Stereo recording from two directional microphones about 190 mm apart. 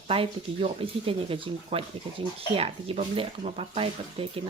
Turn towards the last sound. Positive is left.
turn(degrees=-30)  # may be behind; listen again after turning